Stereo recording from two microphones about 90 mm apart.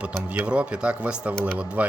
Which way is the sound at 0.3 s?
15° right (ahead or behind).